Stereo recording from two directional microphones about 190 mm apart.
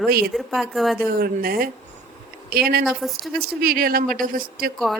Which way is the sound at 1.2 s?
50° right (ahead or behind).